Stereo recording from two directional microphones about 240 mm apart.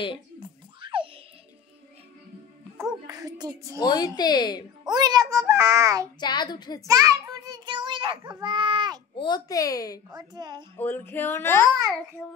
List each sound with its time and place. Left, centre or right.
0.7 s a sound: right
3.1 s a sound: centre
3.8 s a child's voice: centre
4.8 s a child's voice: centre
6.1 s a child's voice: centre
6.9 s a child's voice: centre
9.1 s a child's voice: centre
10.1 s a child's voice: centre
10.8 s a child's voice: centre